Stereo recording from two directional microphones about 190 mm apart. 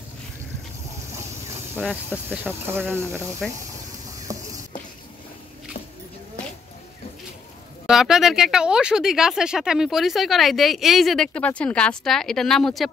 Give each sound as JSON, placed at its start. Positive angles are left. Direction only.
{"t": 1.8, "sound": "speech", "side_deg": -10}
{"t": 3.4, "sound": "speech", "side_deg": 0}
{"t": 4.3, "sound": "a sound", "side_deg": -15}
{"t": 7.8, "sound": "speech", "side_deg": 0}